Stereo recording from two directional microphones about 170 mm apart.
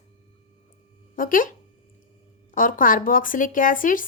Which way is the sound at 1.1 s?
55° left (ahead or behind).